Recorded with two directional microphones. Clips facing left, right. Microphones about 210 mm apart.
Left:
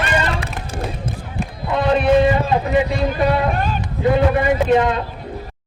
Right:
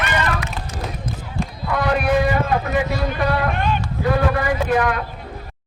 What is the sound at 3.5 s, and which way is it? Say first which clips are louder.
Speech: left 1 dB; 40° left (ahead or behind).